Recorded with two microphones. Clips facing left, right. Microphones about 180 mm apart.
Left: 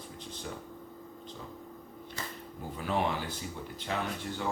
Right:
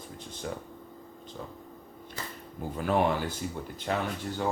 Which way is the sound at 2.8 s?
50° right (ahead or behind).